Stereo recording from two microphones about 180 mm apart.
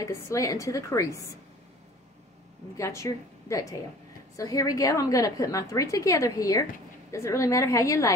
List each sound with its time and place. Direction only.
0.0 s a woman's voice: 15° left (ahead or behind)
2.8 s a woman's voice: 15° left (ahead or behind)